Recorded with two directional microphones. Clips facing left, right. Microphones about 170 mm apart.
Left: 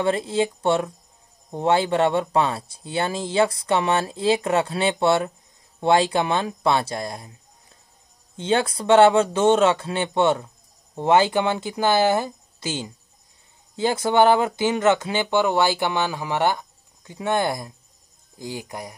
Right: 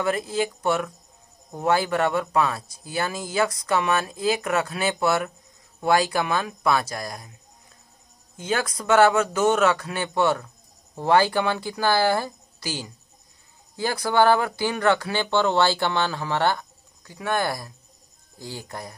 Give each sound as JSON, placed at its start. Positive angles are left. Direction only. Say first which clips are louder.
{"t": 0.0, "sound": "speech", "louder": "left 3 dB", "side_deg": 25}
{"t": 8.4, "sound": "speech", "louder": "left 5 dB", "side_deg": 30}